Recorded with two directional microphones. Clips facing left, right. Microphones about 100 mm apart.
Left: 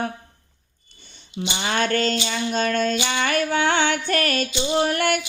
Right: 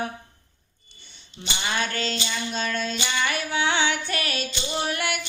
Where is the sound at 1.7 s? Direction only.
50° left (ahead or behind).